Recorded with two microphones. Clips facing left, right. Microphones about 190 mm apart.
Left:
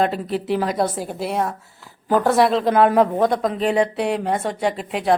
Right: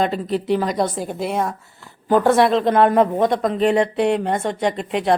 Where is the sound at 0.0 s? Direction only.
5° left (ahead or behind).